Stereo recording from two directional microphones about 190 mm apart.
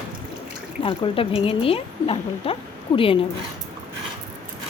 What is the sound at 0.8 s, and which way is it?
A woman's voice, 30° left (ahead or behind).